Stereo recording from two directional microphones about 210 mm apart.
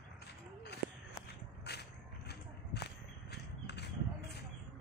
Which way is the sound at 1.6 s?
50° left (ahead or behind).